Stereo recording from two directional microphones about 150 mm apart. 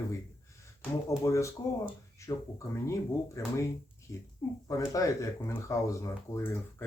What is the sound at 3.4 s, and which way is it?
Speech, 20° left (ahead or behind).